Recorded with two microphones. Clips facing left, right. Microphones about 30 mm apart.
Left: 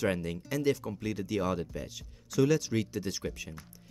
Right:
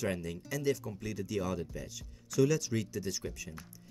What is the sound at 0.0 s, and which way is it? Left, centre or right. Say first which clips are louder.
Speech: left 4 dB; left.